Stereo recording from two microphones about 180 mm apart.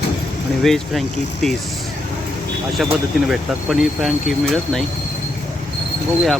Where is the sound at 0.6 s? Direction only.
Centre (ahead or behind).